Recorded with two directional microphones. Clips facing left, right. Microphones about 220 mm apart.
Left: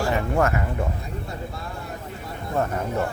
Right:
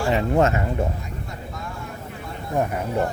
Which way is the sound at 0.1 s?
20° right (ahead or behind).